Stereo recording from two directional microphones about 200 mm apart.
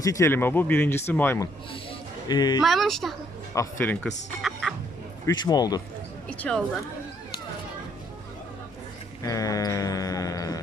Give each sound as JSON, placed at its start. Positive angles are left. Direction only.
{"t": 0.0, "sound": "speech", "side_deg": 15}
{"t": 1.7, "sound": "a sound", "side_deg": 25}
{"t": 2.6, "sound": "speech", "side_deg": 0}
{"t": 3.5, "sound": "speech", "side_deg": 15}
{"t": 5.2, "sound": "a man's voice", "side_deg": 20}
{"t": 6.2, "sound": "speech", "side_deg": 5}
{"t": 9.2, "sound": "sheep", "side_deg": 15}